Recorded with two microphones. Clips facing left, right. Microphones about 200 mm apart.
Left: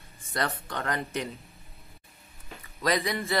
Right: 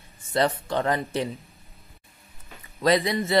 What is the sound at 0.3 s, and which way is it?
Speech, 25° right (ahead or behind).